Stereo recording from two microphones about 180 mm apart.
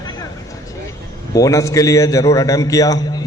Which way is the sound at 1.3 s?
20° left (ahead or behind).